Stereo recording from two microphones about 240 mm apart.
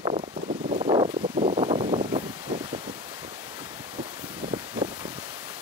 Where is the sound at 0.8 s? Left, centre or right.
Centre.